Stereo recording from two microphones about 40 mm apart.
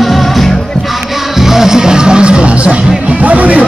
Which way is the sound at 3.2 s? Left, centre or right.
Right.